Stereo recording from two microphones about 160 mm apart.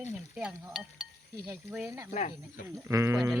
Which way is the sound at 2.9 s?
20° right (ahead or behind).